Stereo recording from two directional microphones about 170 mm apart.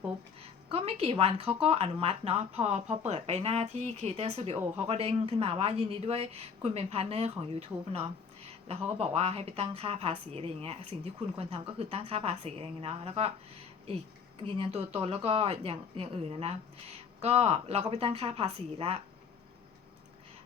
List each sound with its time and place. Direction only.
0.7 s a woman's voice: 35° right (ahead or behind)
14.4 s a woman's voice: 35° right (ahead or behind)